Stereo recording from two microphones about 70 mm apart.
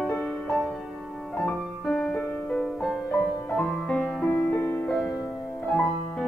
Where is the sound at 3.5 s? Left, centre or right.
Centre.